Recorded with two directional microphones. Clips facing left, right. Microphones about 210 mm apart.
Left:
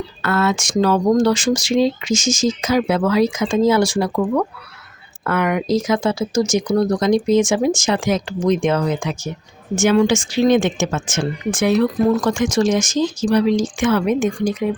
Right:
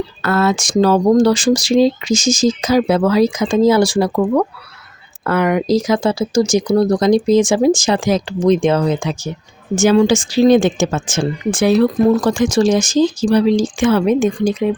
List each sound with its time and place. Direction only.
0.2 s speech: 35° right (ahead or behind)